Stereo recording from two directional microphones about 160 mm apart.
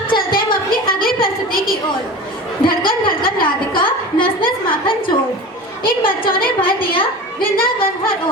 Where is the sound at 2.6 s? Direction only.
65° left (ahead or behind).